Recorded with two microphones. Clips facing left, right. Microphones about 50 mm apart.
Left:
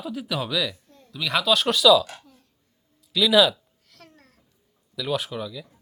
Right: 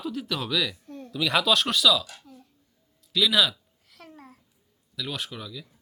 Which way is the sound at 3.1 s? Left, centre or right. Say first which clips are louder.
Left 5 dB; centre.